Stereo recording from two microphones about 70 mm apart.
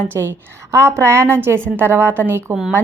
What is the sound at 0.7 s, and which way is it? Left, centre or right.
A woman's voice, right.